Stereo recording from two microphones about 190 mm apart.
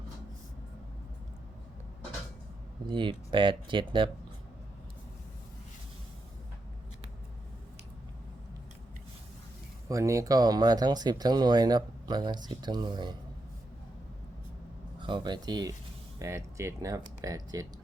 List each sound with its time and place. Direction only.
2.8 s speech: 25° right (ahead or behind)
9.9 s speech: 15° right (ahead or behind)
15.0 s speech: 25° right (ahead or behind)